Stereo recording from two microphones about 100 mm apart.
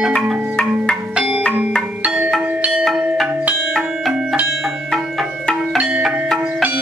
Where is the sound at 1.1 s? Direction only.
5° right (ahead or behind).